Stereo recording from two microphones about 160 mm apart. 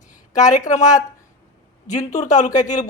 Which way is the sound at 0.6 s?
50° left (ahead or behind).